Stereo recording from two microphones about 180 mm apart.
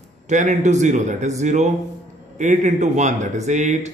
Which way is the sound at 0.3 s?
40° right (ahead or behind).